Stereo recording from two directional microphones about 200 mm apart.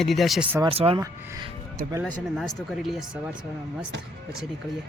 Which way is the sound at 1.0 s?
15° right (ahead or behind).